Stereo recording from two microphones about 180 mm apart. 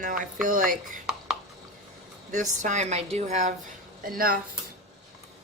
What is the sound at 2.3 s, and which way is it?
Speech, 45° right (ahead or behind).